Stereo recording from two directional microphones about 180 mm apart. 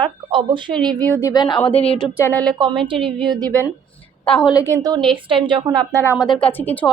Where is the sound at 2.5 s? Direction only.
25° right (ahead or behind).